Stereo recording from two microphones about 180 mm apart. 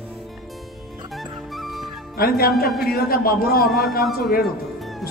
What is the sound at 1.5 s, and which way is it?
Music, centre (ahead or behind).